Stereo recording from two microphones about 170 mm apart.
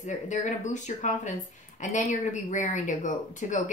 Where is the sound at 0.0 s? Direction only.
45° left (ahead or behind).